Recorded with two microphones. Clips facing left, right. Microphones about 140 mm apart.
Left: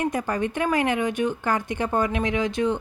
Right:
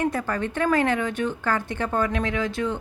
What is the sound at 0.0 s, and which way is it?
Speech, 15° left (ahead or behind).